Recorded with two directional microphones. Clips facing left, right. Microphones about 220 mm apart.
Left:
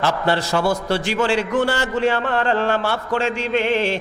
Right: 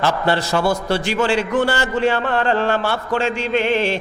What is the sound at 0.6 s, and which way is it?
Speech, 30° right (ahead or behind).